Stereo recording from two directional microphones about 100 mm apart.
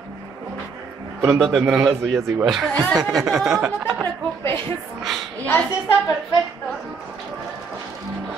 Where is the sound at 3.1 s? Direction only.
5° right (ahead or behind).